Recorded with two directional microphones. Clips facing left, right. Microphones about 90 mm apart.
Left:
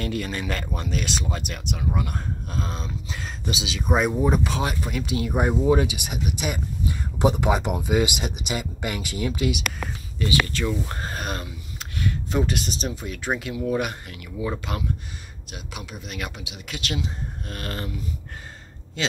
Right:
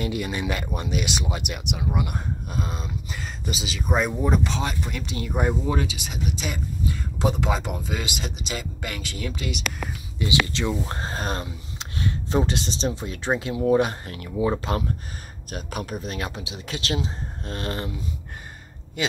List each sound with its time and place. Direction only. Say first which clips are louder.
0.0 s speech: right 1 dB; 10° right (ahead or behind); by 9.6 s 15° left (ahead or behind)
10.1 s speech: even; 20° right (ahead or behind)